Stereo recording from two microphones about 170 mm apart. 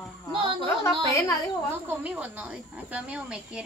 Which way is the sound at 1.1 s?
20° left (ahead or behind).